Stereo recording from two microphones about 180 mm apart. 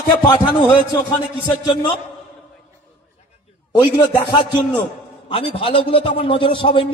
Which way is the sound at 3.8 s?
25° left (ahead or behind).